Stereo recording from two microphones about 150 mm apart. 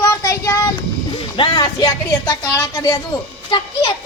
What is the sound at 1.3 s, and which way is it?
A woman's voice, 30° left (ahead or behind).